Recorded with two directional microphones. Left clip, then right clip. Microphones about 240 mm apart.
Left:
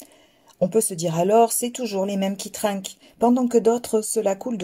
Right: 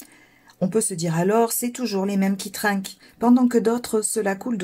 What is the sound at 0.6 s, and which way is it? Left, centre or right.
Speech, left.